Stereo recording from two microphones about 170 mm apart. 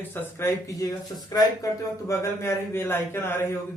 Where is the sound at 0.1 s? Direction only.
15° left (ahead or behind).